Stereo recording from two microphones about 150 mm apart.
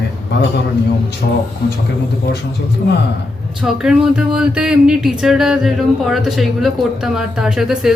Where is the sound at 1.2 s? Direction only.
90° left.